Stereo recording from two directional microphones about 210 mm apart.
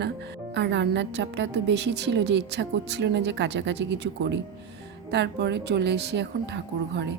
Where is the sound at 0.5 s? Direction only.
55° right (ahead or behind).